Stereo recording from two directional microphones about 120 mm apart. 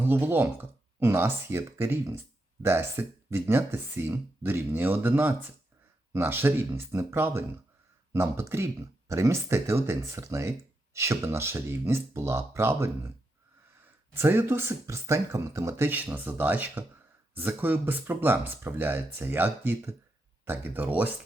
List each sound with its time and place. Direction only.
0.0 s speech: 15° right (ahead or behind)
14.1 s speech: 20° right (ahead or behind)